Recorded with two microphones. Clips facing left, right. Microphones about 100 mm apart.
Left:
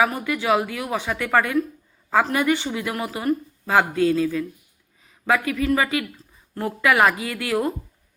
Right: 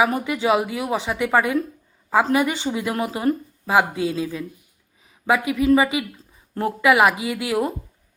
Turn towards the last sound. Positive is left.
turn(degrees=-15)  # may be behind; listen again after turning